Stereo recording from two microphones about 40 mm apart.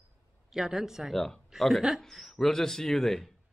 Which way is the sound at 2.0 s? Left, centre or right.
Centre.